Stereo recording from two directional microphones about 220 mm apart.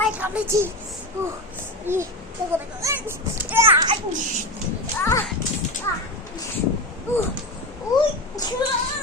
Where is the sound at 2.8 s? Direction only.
15° right (ahead or behind).